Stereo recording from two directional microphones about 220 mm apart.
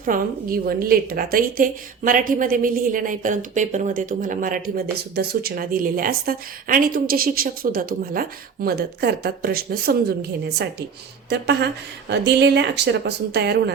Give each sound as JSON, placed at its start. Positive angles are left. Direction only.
{"t": 0.0, "sound": "a woman's voice", "side_deg": -40}
{"t": 11.3, "sound": "a woman's voice", "side_deg": -50}